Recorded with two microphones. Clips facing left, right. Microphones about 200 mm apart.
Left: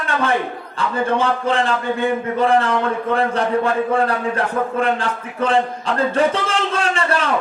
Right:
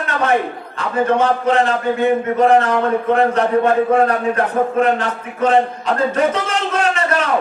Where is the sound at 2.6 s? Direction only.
35° right (ahead or behind).